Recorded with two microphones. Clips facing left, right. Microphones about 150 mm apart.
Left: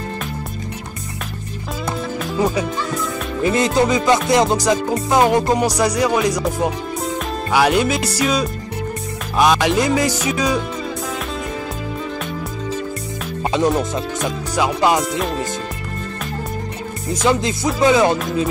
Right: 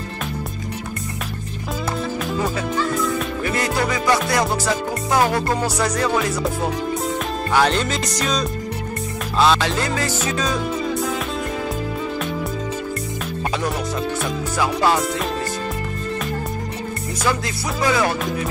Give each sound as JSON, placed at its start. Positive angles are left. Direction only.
{"t": 2.3, "sound": "music", "side_deg": 15}
{"t": 13.5, "sound": "speech", "side_deg": 20}
{"t": 14.5, "sound": "music", "side_deg": 20}
{"t": 17.1, "sound": "music", "side_deg": 20}